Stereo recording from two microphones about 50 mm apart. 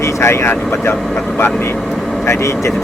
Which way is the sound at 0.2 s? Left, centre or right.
Left.